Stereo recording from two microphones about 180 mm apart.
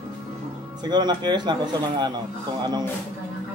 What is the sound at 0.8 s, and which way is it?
Speech, 25° right (ahead or behind).